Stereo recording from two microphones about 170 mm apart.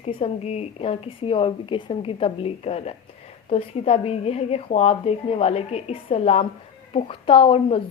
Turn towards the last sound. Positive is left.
turn(degrees=30)  # may be behind; listen again after turning